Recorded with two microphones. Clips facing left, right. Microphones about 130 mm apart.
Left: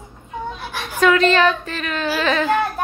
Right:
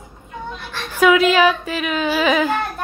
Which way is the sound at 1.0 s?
10° right (ahead or behind).